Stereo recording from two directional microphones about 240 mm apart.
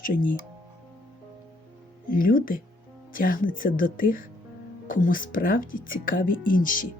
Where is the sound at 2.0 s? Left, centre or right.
Left.